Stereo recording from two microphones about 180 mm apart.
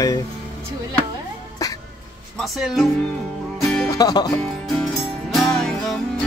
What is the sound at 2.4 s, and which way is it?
Speech, centre (ahead or behind).